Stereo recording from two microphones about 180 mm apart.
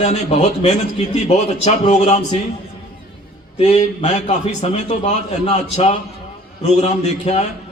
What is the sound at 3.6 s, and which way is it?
A man's voice, 40° left (ahead or behind).